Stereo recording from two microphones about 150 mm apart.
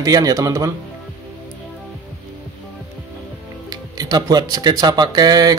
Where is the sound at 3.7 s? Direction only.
25° right (ahead or behind).